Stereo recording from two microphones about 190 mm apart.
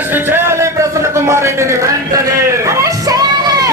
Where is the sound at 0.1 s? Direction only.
10° right (ahead or behind).